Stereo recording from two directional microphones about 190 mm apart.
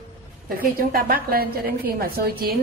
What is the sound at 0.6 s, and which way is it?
A woman's voice, 50° right (ahead or behind).